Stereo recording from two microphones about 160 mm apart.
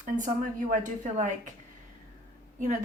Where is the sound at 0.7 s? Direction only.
50° right (ahead or behind).